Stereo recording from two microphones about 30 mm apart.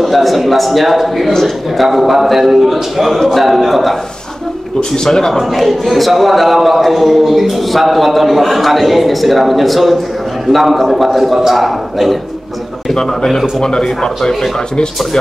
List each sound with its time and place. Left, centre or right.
0.0 s a man's voice: centre
4.9 s speech: left
5.3 s a man's voice: centre
12.9 s speech: left